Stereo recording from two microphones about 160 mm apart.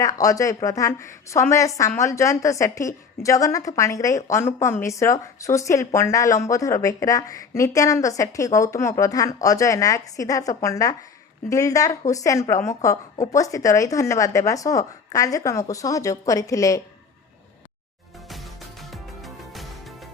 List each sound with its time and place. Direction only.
0.0 s a woman's voice: 20° left (ahead or behind)
18.3 s music: centre (ahead or behind)